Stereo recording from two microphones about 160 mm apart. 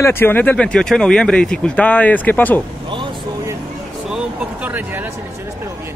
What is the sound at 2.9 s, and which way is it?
Vehicle, 30° right (ahead or behind).